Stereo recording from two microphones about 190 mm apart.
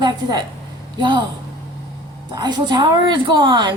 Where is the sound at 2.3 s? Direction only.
20° right (ahead or behind).